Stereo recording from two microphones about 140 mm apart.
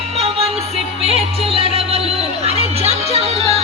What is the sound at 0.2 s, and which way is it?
Music, 45° right (ahead or behind).